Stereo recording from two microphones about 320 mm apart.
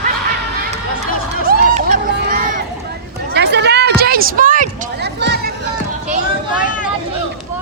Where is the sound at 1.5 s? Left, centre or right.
Right.